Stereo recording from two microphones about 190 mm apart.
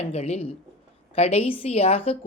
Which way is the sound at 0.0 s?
35° left (ahead or behind).